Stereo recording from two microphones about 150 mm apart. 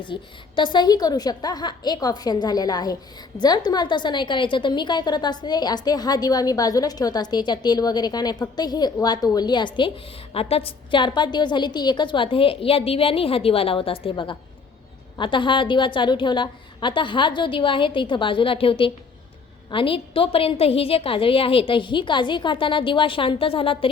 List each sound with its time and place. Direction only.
0.0 s a woman's voice: 30° left (ahead or behind)